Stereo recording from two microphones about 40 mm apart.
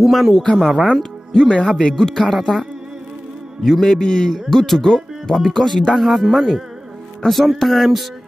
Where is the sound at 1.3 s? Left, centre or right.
Centre.